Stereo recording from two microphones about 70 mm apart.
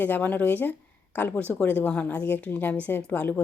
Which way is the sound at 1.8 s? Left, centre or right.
Centre.